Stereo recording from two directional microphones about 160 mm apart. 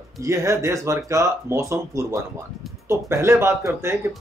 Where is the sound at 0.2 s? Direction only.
20° right (ahead or behind).